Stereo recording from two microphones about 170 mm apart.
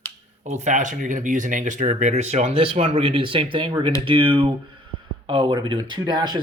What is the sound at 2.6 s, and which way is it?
Speech, 30° right (ahead or behind).